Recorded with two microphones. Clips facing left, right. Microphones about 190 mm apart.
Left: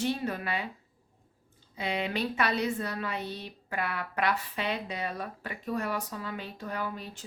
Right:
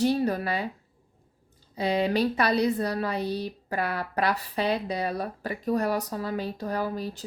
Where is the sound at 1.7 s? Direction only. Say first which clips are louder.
Right 7 dB; 35° right (ahead or behind).